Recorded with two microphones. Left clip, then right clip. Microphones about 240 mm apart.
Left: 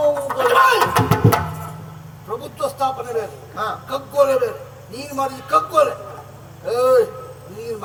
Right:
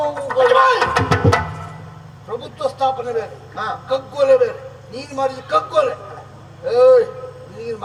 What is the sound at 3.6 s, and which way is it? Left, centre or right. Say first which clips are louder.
A woman's voice: right 3 dB; left.